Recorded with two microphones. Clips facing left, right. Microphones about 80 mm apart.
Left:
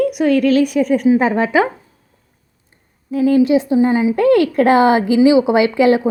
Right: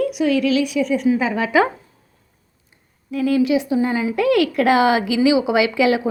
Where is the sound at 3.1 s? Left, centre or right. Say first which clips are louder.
Left 5 dB; left.